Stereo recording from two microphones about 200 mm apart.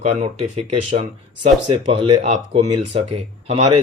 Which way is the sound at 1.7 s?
25° right (ahead or behind).